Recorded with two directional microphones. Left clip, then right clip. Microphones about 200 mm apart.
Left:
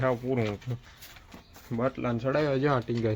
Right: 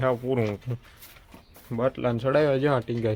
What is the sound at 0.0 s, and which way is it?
Speech, 15° right (ahead or behind).